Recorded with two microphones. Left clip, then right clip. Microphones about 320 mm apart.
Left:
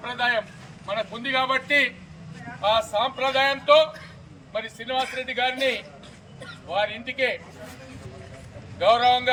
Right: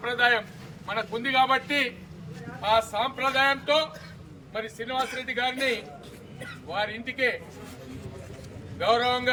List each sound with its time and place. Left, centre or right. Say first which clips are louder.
0.0 s a man's voice: right 1 dB; centre
6.7 s a man's voice: left 4 dB; centre
8.8 s a man's voice: left 5 dB; centre